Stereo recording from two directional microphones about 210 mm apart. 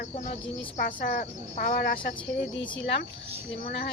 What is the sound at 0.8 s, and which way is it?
Speech, 40° left (ahead or behind).